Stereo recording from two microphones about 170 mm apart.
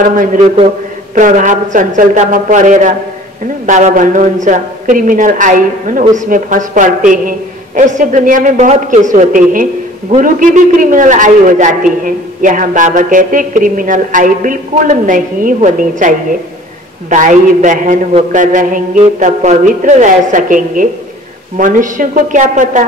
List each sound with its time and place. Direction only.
0.1 s a man's voice: 50° right (ahead or behind)
17.1 s a man's voice: 45° right (ahead or behind)